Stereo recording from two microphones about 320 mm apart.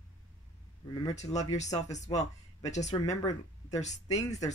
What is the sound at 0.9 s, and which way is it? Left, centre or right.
Speech, centre.